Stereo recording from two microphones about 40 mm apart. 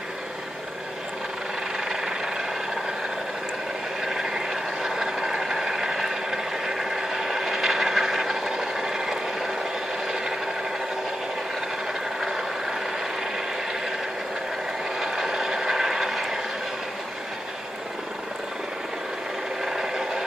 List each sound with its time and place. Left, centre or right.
1.9 s vehicle: centre
4.0 s vehicle: centre
10.0 s a sound: centre
12.2 s vehicle: centre
15.0 s vehicle: centre
19.6 s a sound: centre
19.9 s wood: centre